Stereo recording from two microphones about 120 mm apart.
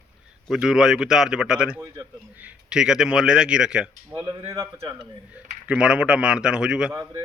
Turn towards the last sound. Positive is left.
turn(degrees=-25)  # may be behind; listen again after turning